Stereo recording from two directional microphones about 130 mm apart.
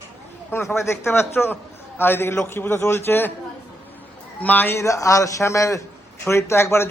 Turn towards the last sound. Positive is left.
turn(degrees=20)  # may be behind; listen again after turning